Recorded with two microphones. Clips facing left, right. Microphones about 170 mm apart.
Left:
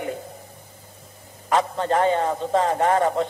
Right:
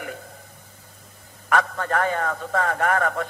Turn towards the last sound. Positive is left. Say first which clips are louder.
# left 3 dB
turn(degrees=20)  # may be behind; listen again after turning